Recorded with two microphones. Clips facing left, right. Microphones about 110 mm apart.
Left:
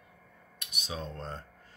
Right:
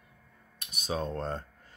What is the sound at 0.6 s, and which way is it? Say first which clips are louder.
Speech: right 6 dB; 40° right (ahead or behind).